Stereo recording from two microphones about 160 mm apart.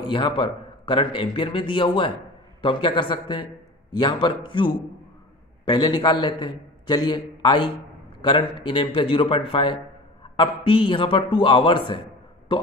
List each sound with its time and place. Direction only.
0.0 s a man's voice: 30° left (ahead or behind)